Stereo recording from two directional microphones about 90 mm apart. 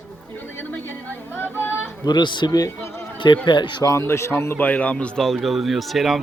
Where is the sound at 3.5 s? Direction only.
60° left (ahead or behind).